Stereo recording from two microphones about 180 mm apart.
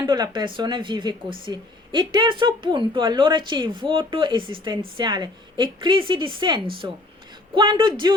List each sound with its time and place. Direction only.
0.1 s speech: 25° right (ahead or behind)